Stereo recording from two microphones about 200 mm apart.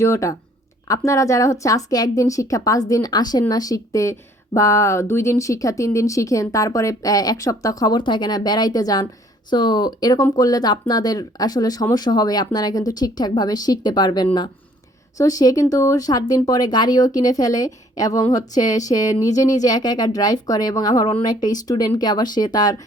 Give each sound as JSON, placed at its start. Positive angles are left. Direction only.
{"t": 0.0, "sound": "speech", "side_deg": 15}